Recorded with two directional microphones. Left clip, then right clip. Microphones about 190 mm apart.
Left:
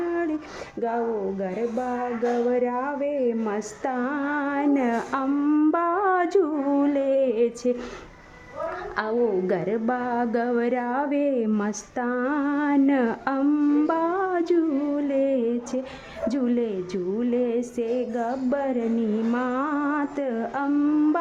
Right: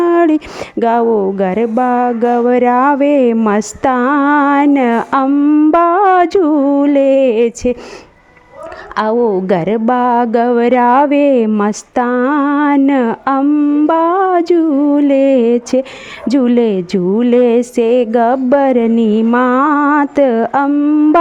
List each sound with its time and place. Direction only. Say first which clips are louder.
0.0 s a sound: right 16 dB; 50° right (ahead or behind)
0.8 s speech: right 15 dB; 50° right (ahead or behind)
5.4 s humming: right 9 dB; 25° right (ahead or behind)
5.7 s speech: right 13 dB; 35° right (ahead or behind)
9.0 s speech: right 12 dB; 40° right (ahead or behind)
13.4 s humming: right 7 dB; 25° right (ahead or behind)
13.8 s speech: right 13 dB; 35° right (ahead or behind)
20.7 s humming: right 11 dB; 25° right (ahead or behind)